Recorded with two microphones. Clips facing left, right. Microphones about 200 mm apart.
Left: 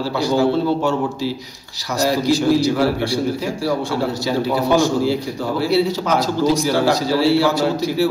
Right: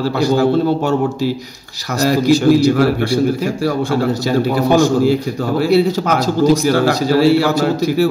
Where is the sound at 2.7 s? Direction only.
50° right (ahead or behind).